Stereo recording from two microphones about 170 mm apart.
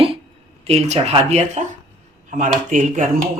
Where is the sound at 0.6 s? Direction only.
35° right (ahead or behind).